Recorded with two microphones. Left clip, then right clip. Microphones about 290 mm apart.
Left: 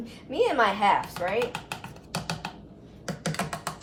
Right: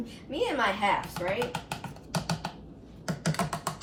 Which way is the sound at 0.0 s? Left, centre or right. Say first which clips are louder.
Left 5 dB; centre.